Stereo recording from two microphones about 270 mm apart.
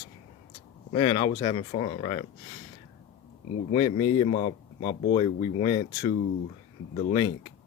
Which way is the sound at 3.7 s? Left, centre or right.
Centre.